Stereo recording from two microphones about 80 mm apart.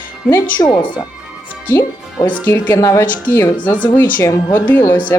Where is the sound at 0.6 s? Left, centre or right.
Left.